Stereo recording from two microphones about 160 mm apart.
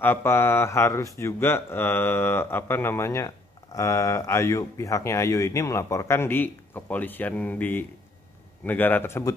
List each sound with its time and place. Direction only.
0.0 s speech: 15° left (ahead or behind)